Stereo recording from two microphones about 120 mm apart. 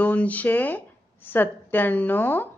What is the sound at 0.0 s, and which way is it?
Speech, 15° left (ahead or behind).